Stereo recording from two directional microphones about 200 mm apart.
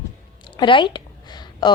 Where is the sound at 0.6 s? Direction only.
25° left (ahead or behind).